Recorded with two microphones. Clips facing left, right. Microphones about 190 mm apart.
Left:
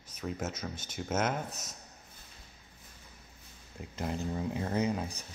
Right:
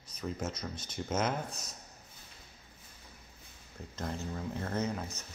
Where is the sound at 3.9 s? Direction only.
10° left (ahead or behind).